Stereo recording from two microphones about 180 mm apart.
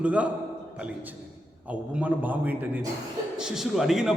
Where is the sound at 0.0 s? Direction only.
5° right (ahead or behind).